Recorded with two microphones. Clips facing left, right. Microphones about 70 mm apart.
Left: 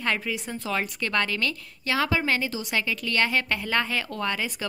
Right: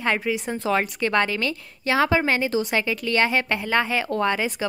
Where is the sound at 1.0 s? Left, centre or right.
Right.